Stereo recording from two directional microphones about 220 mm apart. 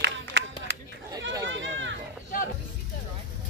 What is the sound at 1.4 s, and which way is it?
Run, 55° right (ahead or behind).